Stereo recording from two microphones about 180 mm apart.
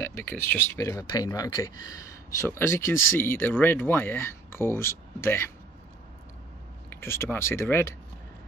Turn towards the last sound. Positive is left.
turn(degrees=15)  # may be behind; listen again after turning